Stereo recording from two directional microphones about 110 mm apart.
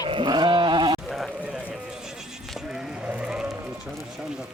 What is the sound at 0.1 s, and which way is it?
Sheep, 45° right (ahead or behind).